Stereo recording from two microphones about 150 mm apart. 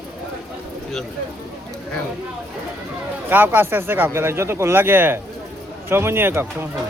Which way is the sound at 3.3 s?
15° right (ahead or behind).